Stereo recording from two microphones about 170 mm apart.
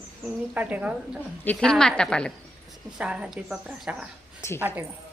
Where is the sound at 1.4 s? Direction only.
5° left (ahead or behind).